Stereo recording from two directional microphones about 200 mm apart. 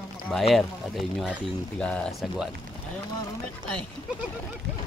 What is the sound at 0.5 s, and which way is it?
Speech, centre (ahead or behind).